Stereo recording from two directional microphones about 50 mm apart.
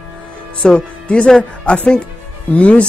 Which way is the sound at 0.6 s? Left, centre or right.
Centre.